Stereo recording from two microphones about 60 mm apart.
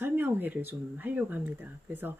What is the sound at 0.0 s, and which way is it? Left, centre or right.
Speech, right.